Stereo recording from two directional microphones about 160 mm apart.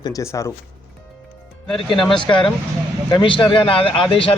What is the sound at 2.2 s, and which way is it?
A man's voice, 30° left (ahead or behind).